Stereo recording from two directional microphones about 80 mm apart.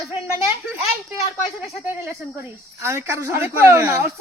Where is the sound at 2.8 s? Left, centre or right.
Right.